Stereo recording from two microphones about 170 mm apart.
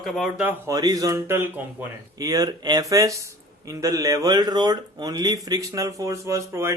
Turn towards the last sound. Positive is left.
turn(degrees=-15)  # may be behind; listen again after turning